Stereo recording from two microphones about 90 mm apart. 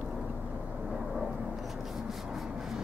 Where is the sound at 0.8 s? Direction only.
5° right (ahead or behind).